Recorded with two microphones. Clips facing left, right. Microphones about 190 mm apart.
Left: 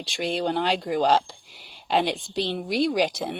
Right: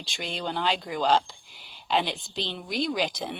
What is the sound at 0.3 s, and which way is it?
Speech, 50° left (ahead or behind).